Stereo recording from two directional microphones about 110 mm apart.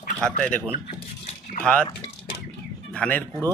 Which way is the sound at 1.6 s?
10° left (ahead or behind).